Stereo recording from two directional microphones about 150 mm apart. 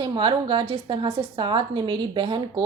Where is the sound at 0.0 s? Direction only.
30° right (ahead or behind).